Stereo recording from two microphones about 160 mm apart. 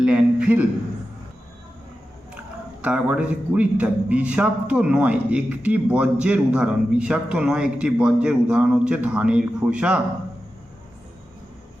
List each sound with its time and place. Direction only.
0.0 s a man's voice: 5° right (ahead or behind)
2.8 s a man's voice: 10° right (ahead or behind)